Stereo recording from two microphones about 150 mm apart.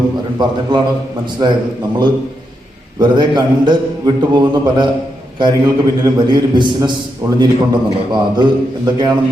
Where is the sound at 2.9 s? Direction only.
30° right (ahead or behind).